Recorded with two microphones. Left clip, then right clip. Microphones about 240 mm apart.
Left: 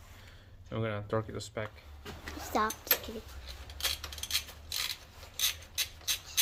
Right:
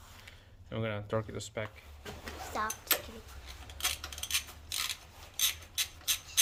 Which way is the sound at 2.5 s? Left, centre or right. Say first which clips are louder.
Left 5 dB; left.